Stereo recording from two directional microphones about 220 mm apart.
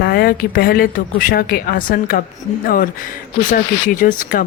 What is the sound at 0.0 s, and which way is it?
Speech, 45° left (ahead or behind).